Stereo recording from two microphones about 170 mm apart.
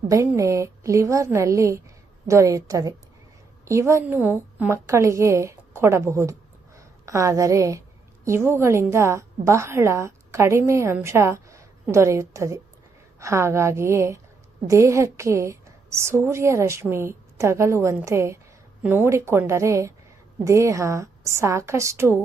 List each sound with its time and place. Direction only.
0.1 s a woman's voice: 15° right (ahead or behind)